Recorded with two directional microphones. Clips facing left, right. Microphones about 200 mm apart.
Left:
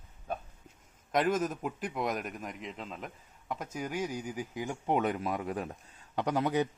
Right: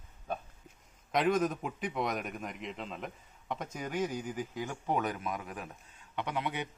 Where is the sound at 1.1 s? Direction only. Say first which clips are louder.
Even; 5° left (ahead or behind).